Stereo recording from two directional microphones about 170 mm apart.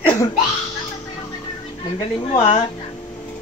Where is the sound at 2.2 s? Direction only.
35° left (ahead or behind).